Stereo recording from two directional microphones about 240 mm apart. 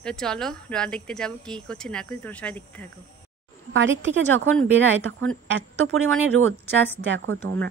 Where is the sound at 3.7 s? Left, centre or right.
Right.